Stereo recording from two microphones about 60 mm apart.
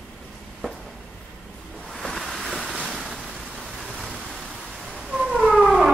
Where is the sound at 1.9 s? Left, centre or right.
Centre.